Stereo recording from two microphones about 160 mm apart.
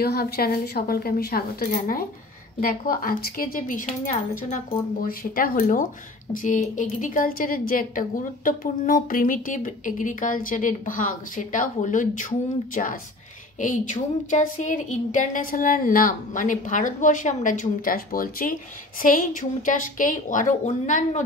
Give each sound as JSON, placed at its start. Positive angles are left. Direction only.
{"t": 0.0, "sound": "a woman's voice", "side_deg": 75}